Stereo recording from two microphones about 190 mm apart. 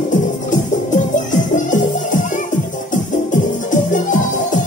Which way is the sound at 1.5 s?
40° left (ahead or behind).